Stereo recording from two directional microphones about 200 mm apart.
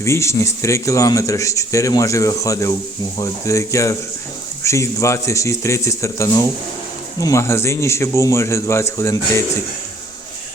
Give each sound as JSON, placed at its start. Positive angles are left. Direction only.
{"t": 0.0, "sound": "speech", "side_deg": 15}